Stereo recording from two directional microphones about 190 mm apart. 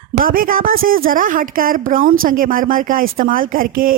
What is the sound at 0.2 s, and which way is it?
A woman's voice, 50° right (ahead or behind).